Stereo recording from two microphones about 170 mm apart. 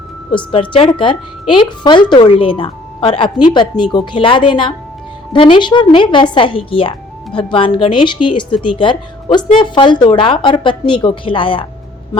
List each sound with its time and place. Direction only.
0.3 s a woman's voice: 30° left (ahead or behind)